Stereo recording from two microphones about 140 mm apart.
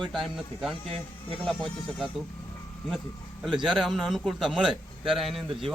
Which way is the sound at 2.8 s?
Centre (ahead or behind).